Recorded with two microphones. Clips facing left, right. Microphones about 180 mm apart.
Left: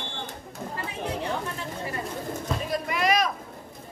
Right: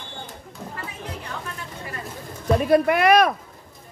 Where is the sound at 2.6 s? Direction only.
60° right (ahead or behind).